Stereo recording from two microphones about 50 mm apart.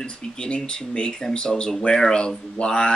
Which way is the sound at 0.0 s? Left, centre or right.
Centre.